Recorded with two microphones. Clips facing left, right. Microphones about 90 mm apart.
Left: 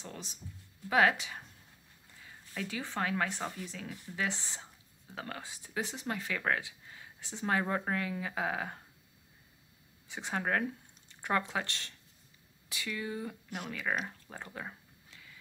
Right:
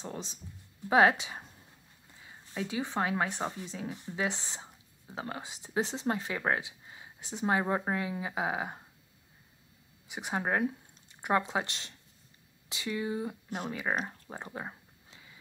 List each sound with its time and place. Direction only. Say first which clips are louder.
0.0 s speech: right 5 dB; 25° right (ahead or behind)
10.0 s speech: right 2 dB; 15° right (ahead or behind)
14.3 s a sound: right 5 dB; 25° right (ahead or behind)